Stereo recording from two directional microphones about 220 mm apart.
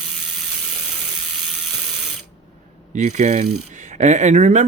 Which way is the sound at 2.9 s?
35° right (ahead or behind).